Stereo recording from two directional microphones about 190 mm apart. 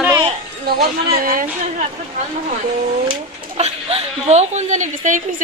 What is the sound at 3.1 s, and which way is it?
Speech, 30° right (ahead or behind).